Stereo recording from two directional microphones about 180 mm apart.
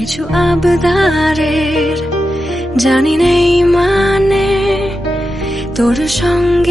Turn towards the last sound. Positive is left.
turn(degrees=0)  # may be behind; listen again after turning